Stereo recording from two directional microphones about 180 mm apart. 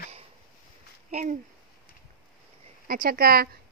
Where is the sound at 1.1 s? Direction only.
40° right (ahead or behind).